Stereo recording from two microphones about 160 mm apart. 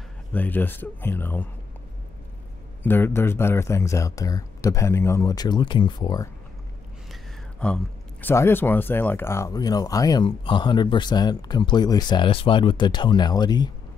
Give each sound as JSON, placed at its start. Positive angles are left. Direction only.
{"t": 0.3, "sound": "speech", "side_deg": 10}
{"t": 2.8, "sound": "speech", "side_deg": 15}
{"t": 7.6, "sound": "speech", "side_deg": 10}